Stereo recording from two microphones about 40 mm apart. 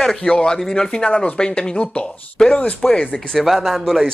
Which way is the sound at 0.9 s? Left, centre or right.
Left.